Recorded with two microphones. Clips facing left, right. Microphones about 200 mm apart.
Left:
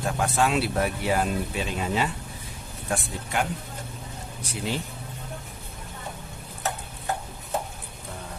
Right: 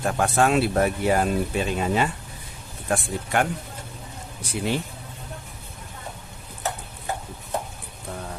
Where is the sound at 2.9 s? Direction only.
55° right (ahead or behind).